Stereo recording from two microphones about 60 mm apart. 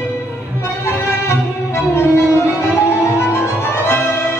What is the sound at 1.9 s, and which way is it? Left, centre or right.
Music, left.